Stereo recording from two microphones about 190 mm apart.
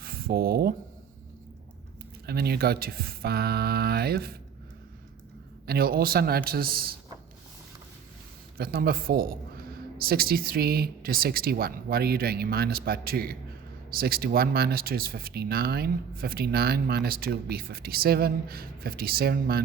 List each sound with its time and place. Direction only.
0.0 s a sound: 50° right (ahead or behind)
2.2 s speech: 55° right (ahead or behind)
5.6 s speech: 55° right (ahead or behind)
8.5 s speech: 55° right (ahead or behind)